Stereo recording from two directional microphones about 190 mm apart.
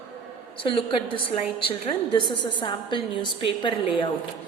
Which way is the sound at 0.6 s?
30° left (ahead or behind).